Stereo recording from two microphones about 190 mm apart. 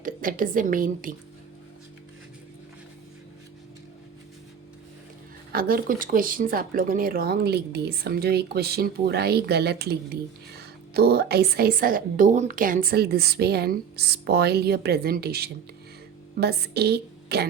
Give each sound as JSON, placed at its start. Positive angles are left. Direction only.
{"t": 0.0, "sound": "a woman's voice", "side_deg": -45}
{"t": 5.5, "sound": "speech", "side_deg": -50}